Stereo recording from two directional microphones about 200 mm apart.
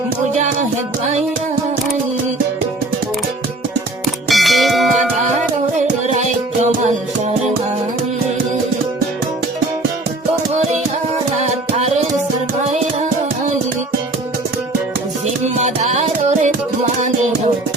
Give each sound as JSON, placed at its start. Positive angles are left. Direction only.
{"t": 4.3, "sound": "music", "side_deg": 0}
{"t": 11.3, "sound": "music", "side_deg": -35}
{"t": 15.5, "sound": "music", "side_deg": -35}